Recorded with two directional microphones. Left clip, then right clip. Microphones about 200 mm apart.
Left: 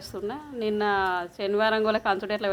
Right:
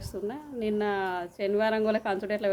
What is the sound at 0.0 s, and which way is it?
A woman's voice, 10° right (ahead or behind).